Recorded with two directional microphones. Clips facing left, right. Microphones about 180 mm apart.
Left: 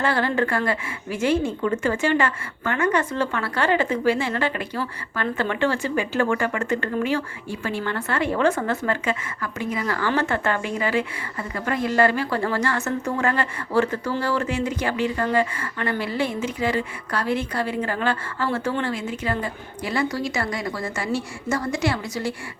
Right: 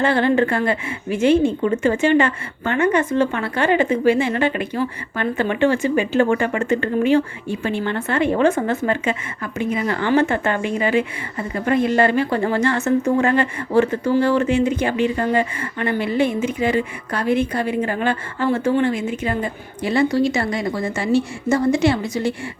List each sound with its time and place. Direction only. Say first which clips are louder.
0.0 s a woman's voice: right 5 dB; 20° right (ahead or behind)